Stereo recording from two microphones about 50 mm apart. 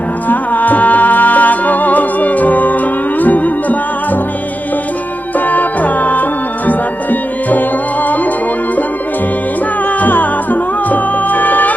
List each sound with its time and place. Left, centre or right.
0.3 s music: left
5.5 s music: left
10.0 s music: left